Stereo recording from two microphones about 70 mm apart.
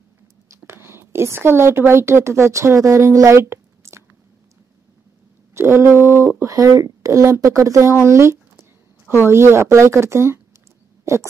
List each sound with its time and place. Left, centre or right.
0.5 s speech: right
5.5 s a woman's voice: right
11.1 s a sound: right